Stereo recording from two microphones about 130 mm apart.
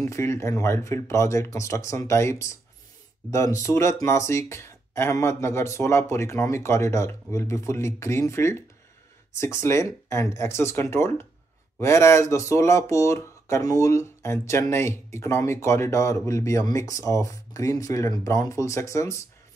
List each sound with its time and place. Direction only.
0.0 s speech: 20° left (ahead or behind)